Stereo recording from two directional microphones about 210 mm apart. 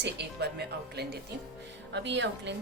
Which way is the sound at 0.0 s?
55° right (ahead or behind).